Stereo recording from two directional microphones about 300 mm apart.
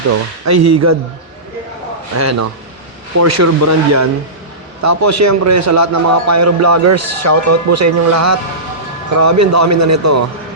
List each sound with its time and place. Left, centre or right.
0.1 s a man's voice: right
2.1 s a man's voice: right